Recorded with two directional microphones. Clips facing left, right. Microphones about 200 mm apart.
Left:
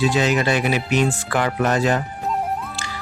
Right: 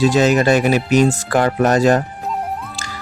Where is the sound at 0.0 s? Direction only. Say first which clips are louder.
Right 5 dB; 45° right (ahead or behind).